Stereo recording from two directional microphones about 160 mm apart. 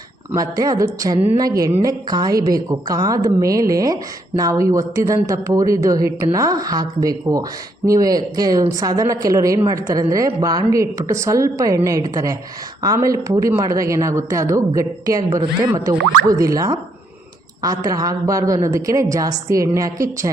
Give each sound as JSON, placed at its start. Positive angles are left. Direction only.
{"t": 0.3, "sound": "a woman's voice", "side_deg": -25}